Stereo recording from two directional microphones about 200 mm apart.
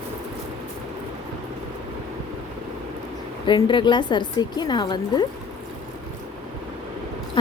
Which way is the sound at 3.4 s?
25° left (ahead or behind).